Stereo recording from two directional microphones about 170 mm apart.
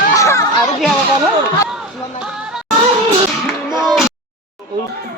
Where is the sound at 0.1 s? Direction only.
20° left (ahead or behind).